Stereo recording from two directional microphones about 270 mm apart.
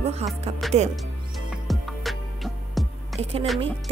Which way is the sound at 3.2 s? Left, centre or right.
Right.